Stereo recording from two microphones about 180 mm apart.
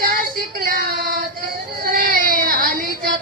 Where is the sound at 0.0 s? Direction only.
55° right (ahead or behind).